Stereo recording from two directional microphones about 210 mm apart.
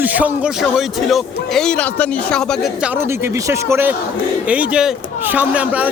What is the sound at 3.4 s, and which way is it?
Speech, 15° right (ahead or behind).